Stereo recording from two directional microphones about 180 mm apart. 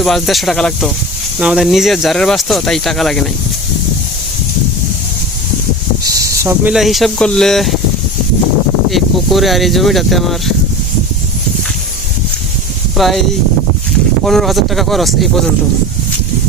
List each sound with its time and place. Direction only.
0.0 s speech: centre (ahead or behind)
6.0 s a sound: 20° right (ahead or behind)
6.7 s speech: centre (ahead or behind)
8.9 s speech: centre (ahead or behind)
13.0 s speech: centre (ahead or behind)
14.3 s speech: centre (ahead or behind)